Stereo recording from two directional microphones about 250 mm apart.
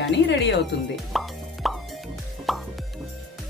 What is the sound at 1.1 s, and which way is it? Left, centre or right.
Music, centre.